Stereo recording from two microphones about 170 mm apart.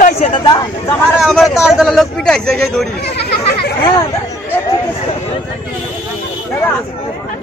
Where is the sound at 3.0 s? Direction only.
75° left (ahead or behind).